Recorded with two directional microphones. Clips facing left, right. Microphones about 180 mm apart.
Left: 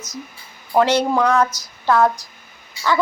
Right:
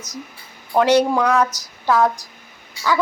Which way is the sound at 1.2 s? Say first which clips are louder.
Left 1 dB; centre (ahead or behind).